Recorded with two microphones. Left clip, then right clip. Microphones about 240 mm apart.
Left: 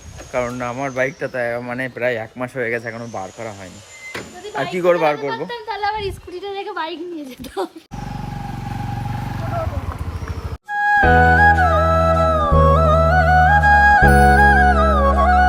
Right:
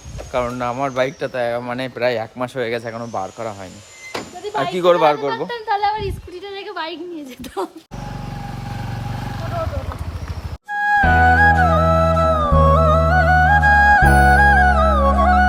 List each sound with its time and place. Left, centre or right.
0.3 s speech: centre
4.5 s speech: centre
5.5 s a sound: right
6.4 s music: centre
7.6 s speech: centre
10.7 s music: centre